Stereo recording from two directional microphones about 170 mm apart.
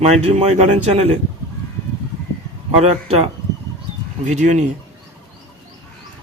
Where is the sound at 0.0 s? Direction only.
40° right (ahead or behind).